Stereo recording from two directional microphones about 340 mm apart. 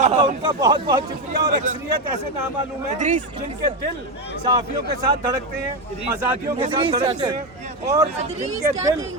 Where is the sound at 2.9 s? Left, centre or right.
Right.